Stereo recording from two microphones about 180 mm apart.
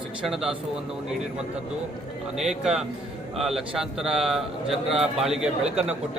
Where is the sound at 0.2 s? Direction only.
Centre (ahead or behind).